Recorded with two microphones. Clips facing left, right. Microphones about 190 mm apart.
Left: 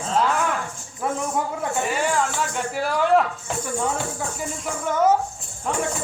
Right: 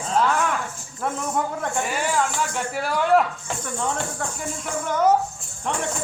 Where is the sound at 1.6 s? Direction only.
Centre (ahead or behind).